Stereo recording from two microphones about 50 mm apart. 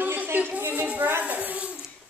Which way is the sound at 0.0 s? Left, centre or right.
Right.